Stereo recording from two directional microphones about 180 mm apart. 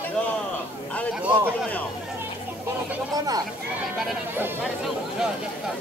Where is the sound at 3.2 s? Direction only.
20° right (ahead or behind).